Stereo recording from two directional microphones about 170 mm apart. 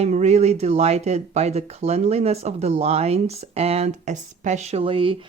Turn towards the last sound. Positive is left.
turn(degrees=-30)  # may be behind; listen again after turning